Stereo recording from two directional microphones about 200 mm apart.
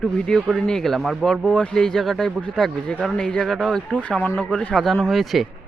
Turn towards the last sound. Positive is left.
turn(degrees=0)  # may be behind; listen again after turning